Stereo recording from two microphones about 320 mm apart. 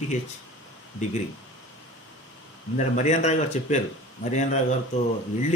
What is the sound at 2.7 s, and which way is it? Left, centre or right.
A man's voice, left.